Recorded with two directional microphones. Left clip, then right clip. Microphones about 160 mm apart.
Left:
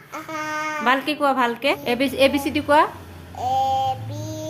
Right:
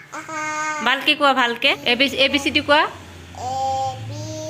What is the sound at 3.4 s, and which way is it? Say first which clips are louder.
Female singing: left 2 dB; 40° left (ahead or behind).